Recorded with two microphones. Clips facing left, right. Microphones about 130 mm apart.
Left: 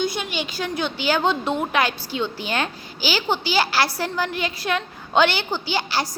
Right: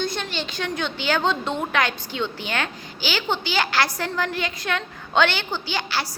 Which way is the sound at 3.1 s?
10° left (ahead or behind).